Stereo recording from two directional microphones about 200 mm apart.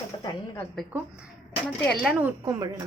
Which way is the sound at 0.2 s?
20° left (ahead or behind).